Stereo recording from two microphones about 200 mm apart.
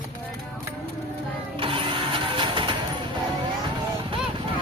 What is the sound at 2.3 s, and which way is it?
Music, 25° right (ahead or behind).